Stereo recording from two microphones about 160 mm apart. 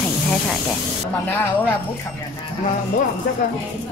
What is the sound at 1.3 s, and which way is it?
Speech, 15° left (ahead or behind).